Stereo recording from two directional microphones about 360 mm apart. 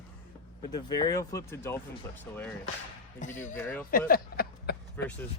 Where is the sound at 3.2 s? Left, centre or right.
Left.